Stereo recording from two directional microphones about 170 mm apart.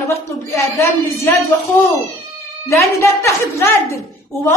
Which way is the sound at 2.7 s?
15° left (ahead or behind).